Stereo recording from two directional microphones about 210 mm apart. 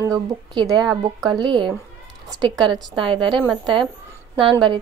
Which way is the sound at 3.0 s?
25° right (ahead or behind).